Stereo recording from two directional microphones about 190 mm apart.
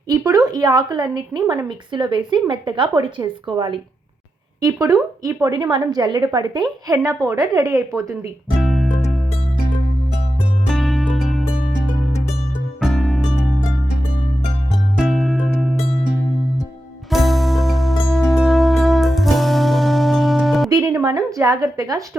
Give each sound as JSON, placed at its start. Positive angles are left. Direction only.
{"t": 0.1, "sound": "a woman's voice", "side_deg": -20}
{"t": 8.6, "sound": "music", "side_deg": 0}
{"t": 10.7, "sound": "music", "side_deg": 0}
{"t": 12.8, "sound": "music", "side_deg": 0}
{"t": 14.9, "sound": "music", "side_deg": 0}
{"t": 17.1, "sound": "music", "side_deg": 0}
{"t": 20.7, "sound": "speech", "side_deg": -20}